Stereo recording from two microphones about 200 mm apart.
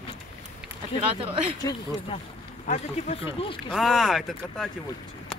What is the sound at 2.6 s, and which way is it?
Speech, 35° left (ahead or behind).